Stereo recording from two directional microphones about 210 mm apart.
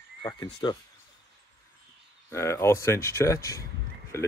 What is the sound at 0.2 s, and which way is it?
Speech, 20° left (ahead or behind).